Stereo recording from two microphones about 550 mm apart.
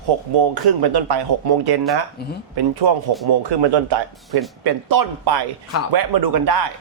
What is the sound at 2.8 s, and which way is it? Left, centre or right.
Speech, right.